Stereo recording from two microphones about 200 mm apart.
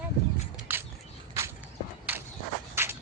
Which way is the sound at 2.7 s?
10° right (ahead or behind).